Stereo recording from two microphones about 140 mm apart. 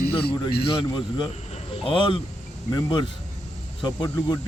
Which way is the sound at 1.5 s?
40° left (ahead or behind).